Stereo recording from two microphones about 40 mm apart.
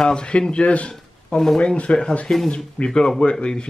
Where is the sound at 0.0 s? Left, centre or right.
Left.